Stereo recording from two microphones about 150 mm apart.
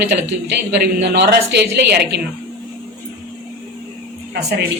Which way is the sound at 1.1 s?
90° right.